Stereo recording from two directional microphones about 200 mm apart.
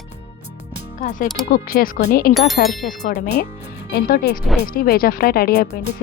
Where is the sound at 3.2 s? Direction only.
55° left (ahead or behind).